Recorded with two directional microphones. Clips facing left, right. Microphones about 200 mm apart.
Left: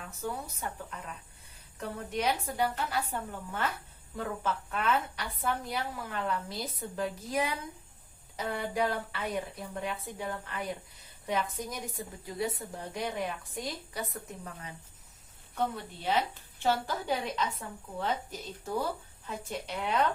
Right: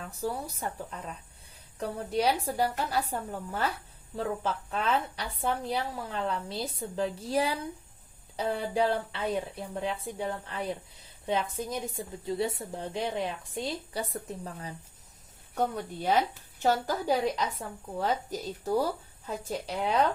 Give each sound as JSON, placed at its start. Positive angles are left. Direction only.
{"t": 0.1, "sound": "a woman's voice", "side_deg": -35}
{"t": 11.7, "sound": "speech", "side_deg": -25}
{"t": 15.5, "sound": "a woman's voice", "side_deg": -45}